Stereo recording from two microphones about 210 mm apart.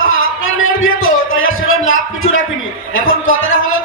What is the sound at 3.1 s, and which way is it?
Speech, 70° left (ahead or behind).